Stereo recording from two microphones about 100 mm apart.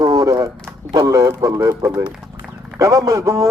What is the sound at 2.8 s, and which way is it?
Speech, 35° right (ahead or behind).